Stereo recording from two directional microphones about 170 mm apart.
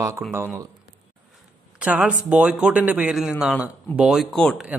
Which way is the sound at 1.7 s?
10° right (ahead or behind).